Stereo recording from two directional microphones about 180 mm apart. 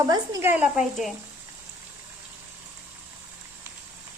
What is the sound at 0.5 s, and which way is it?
Speech, 5° right (ahead or behind).